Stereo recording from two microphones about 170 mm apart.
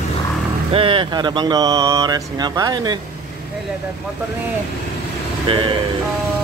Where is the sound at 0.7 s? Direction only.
30° right (ahead or behind).